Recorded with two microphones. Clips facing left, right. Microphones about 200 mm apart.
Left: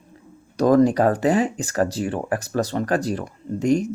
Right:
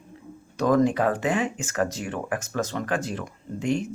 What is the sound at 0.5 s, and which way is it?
Speech, 35° left (ahead or behind).